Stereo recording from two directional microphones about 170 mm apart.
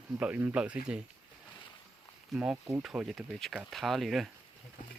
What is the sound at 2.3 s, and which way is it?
Speech, 5° right (ahead or behind).